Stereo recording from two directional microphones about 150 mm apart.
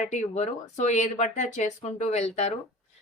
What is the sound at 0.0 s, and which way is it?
Speech, 50° left (ahead or behind).